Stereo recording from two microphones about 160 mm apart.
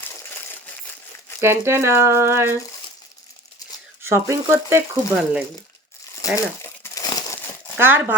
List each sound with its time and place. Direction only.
1.4 s speech: 15° right (ahead or behind)
4.0 s speech: 15° right (ahead or behind)
6.3 s crumpling: 20° left (ahead or behind)
7.8 s speech: 15° right (ahead or behind)